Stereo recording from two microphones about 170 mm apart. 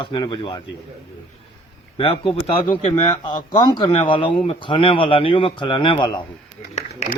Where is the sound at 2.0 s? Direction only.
35° left (ahead or behind).